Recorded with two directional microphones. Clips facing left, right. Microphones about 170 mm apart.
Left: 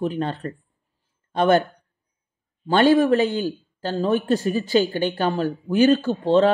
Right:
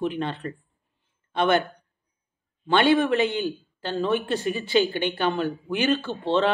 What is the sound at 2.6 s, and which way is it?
Speech, 40° left (ahead or behind).